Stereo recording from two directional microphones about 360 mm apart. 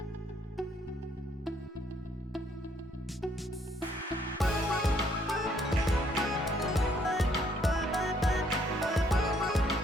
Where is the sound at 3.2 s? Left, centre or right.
Centre.